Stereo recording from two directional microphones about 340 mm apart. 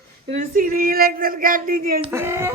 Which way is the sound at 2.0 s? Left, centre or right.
Centre.